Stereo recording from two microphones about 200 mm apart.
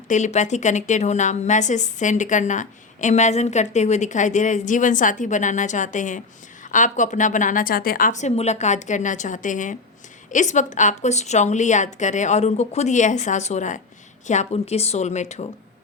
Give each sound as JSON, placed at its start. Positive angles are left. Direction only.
{"t": 0.1, "sound": "a woman's voice", "side_deg": 35}